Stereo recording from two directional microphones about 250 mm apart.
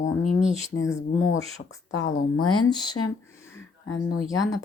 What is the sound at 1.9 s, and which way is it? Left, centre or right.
Speech, left.